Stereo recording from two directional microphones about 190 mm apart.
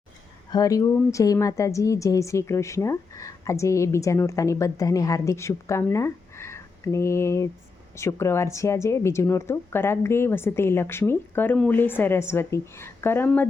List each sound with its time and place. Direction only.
0.5 s a woman's voice: 20° left (ahead or behind)